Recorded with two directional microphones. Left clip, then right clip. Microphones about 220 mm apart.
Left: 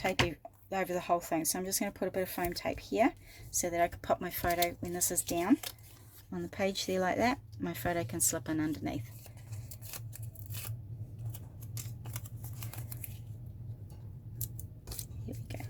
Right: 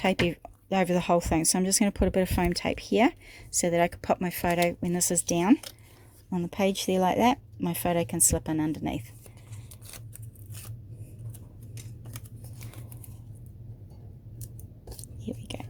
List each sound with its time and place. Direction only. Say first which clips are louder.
0.0 s speech: right 5 dB; 45° right (ahead or behind)
6.7 s speech: right 7 dB; 30° right (ahead or behind)